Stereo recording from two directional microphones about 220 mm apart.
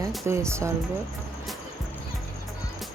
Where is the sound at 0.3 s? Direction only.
10° right (ahead or behind).